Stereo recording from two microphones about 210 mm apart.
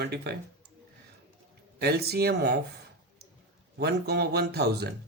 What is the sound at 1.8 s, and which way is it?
Speech, 50° right (ahead or behind).